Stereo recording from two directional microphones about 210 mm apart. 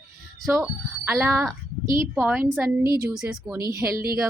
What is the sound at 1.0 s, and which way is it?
Speech, 10° right (ahead or behind).